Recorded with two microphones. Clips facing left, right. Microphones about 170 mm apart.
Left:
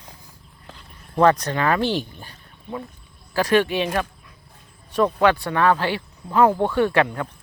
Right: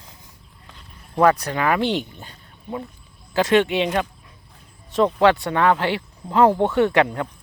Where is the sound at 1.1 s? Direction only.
10° right (ahead or behind).